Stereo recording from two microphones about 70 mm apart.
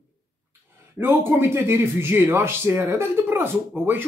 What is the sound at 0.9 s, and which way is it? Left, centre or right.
Speech, right.